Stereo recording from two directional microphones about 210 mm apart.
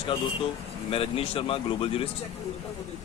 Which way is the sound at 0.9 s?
25° left (ahead or behind).